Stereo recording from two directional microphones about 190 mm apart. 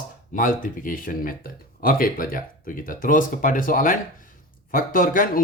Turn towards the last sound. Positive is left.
turn(degrees=45)  # may be behind; listen again after turning